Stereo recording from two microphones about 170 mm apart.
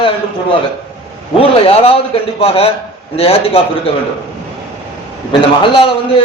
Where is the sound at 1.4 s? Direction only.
35° left (ahead or behind).